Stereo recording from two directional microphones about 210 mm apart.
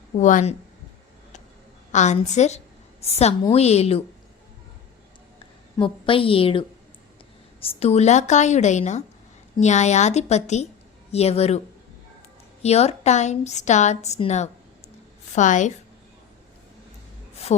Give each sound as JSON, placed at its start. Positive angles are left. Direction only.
{"t": 0.2, "sound": "a woman's voice", "side_deg": 35}
{"t": 1.9, "sound": "a woman's voice", "side_deg": 35}
{"t": 5.7, "sound": "a woman's voice", "side_deg": 25}
{"t": 12.6, "sound": "a woman's voice", "side_deg": 30}